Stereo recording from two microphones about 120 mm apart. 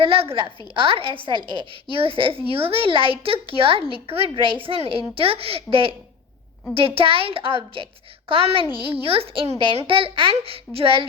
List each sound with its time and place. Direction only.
0.0 s speech: 50° right (ahead or behind)